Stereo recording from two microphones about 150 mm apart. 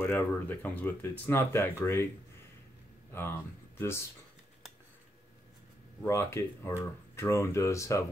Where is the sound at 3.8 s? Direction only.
15° left (ahead or behind).